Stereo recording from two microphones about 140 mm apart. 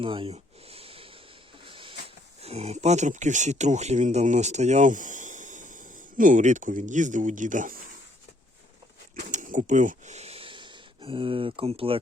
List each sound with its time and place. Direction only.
0.0 s a sound: 40° right (ahead or behind)
2.4 s speech: 45° right (ahead or behind); by 7.8 s 65° right (ahead or behind)
9.3 s speech: 65° right (ahead or behind); by 11.9 s 45° right (ahead or behind)